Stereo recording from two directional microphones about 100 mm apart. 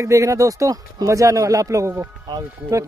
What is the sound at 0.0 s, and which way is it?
Speech, 30° right (ahead or behind).